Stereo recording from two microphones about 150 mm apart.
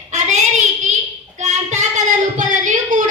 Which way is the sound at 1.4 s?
50° right (ahead or behind).